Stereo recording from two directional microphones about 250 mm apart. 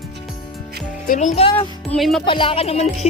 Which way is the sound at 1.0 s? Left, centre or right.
Left.